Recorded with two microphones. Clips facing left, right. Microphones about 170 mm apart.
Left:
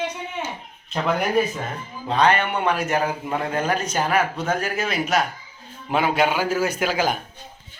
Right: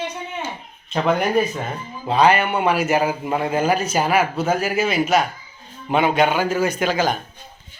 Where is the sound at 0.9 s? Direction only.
Centre (ahead or behind).